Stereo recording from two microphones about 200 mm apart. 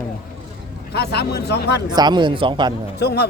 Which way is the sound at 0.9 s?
55° left (ahead or behind).